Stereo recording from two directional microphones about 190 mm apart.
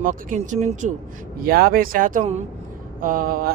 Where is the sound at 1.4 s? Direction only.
50° right (ahead or behind).